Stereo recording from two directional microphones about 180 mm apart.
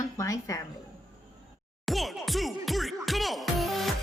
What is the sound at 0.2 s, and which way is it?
Speech, 20° left (ahead or behind).